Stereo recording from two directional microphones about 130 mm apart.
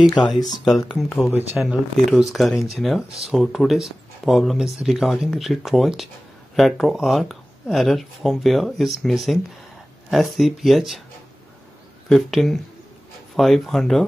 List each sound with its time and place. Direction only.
0.1 s speech: 35° left (ahead or behind)
0.9 s speech: 5° left (ahead or behind)
12.1 s speech: centre (ahead or behind)